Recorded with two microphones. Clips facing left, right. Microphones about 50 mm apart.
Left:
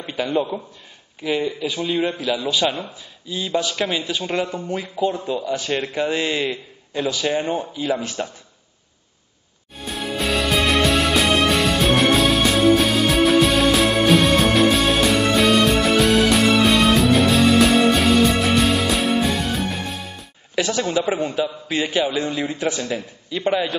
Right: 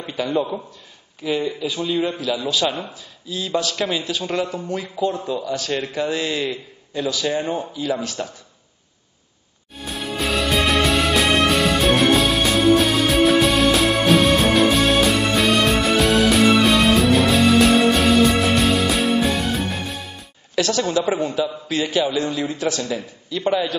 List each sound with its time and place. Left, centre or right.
0.0 s a sound: centre
1.2 s a man's voice: centre
6.4 s a man's voice: centre
9.8 s music: centre
20.5 s a man's voice: centre